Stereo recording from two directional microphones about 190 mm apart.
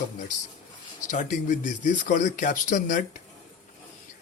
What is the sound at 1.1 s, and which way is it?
Speech, 40° left (ahead or behind).